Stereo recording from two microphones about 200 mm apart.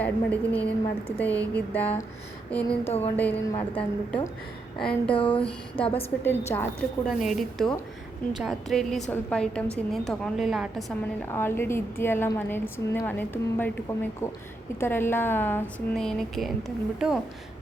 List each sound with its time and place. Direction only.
0.0 s a woman's voice: 10° left (ahead or behind)
5.1 s a sound: 25° left (ahead or behind)
5.4 s a woman's voice: 5° left (ahead or behind)
7.2 s a woman's voice: centre (ahead or behind)
11.3 s a woman's voice: 10° left (ahead or behind)